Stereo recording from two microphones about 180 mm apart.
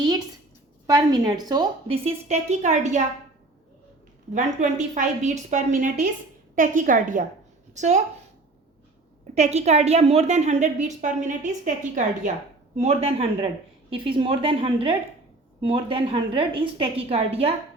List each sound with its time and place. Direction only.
0.9 s a woman's voice: 20° right (ahead or behind)
2.0 s a woman's voice: 40° right (ahead or behind)
4.4 s a woman's voice: 40° right (ahead or behind)
9.3 s a woman's voice: 35° right (ahead or behind)